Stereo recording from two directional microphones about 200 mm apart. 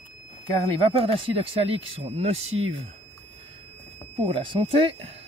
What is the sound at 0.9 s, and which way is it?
A man's voice, 25° right (ahead or behind).